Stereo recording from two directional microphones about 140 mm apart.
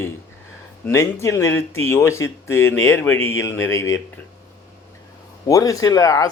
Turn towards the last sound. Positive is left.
turn(degrees=25)  # may be behind; listen again after turning